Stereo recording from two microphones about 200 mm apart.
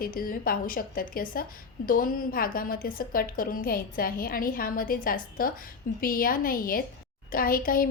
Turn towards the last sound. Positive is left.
turn(degrees=45)  # may be behind; listen again after turning